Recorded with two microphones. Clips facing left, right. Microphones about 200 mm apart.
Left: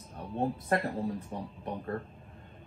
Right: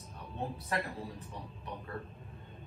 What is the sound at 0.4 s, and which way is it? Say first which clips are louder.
Speech: left 7 dB; 50° left (ahead or behind).